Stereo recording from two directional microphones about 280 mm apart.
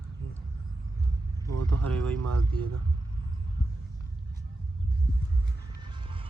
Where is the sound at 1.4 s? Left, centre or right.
Right.